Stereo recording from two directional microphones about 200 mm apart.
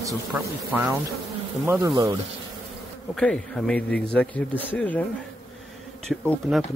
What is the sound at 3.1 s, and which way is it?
Speech, 5° left (ahead or behind).